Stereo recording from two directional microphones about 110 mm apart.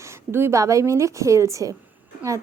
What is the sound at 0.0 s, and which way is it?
A woman's voice, 25° right (ahead or behind).